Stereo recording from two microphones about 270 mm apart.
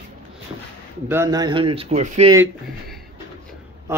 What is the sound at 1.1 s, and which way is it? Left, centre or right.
Speech, centre.